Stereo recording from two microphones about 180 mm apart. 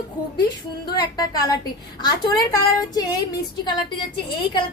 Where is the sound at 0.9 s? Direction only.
20° left (ahead or behind).